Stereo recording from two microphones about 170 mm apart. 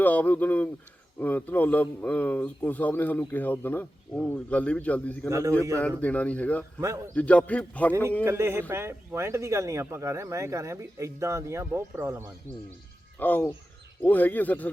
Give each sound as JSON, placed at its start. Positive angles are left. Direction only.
{"t": 0.0, "sound": "a man's voice", "side_deg": 10}
{"t": 5.3, "sound": "speech", "side_deg": -15}
{"t": 6.0, "sound": "a man's voice", "side_deg": 10}
{"t": 6.7, "sound": "speech", "side_deg": -15}
{"t": 7.1, "sound": "a man's voice", "side_deg": 10}
{"t": 8.2, "sound": "speech", "side_deg": -15}
{"t": 13.1, "sound": "a man's voice", "side_deg": 10}